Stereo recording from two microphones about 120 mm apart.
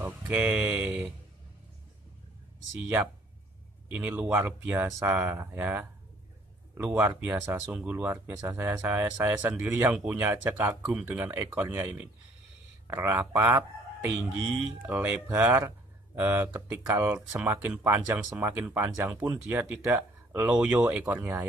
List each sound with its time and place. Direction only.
0.3 s speech: 10° right (ahead or behind)
3.9 s speech: 10° right (ahead or behind)
14.9 s speech: 15° right (ahead or behind)